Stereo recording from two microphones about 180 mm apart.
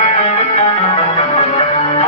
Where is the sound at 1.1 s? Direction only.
35° left (ahead or behind).